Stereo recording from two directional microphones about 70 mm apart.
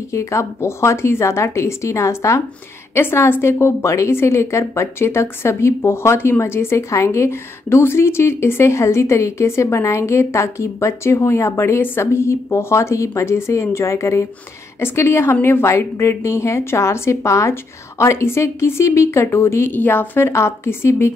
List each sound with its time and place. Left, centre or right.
0.1 s a woman's voice: left
2.9 s a woman's voice: left
19.7 s a woman's voice: left